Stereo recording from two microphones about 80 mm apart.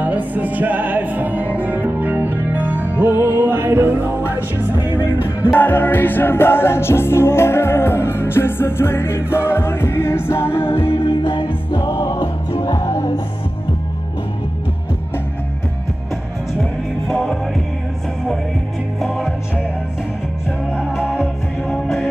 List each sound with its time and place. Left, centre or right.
0.0 s music: right
5.5 s music: left
11.2 s music: left
11.9 s music: left
17.1 s music: centre
20.7 s music: centre